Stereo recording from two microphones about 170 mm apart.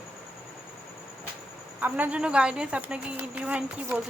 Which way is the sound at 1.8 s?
10° right (ahead or behind).